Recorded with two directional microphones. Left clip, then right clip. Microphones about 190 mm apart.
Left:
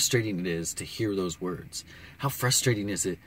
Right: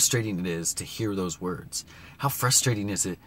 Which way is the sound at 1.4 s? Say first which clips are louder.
Right 1 dB; 15° right (ahead or behind).